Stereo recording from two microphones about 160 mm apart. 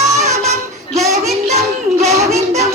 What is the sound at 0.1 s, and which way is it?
Child singing, 45° right (ahead or behind).